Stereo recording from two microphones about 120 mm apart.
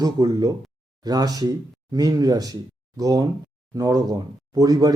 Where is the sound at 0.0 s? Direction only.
30° right (ahead or behind).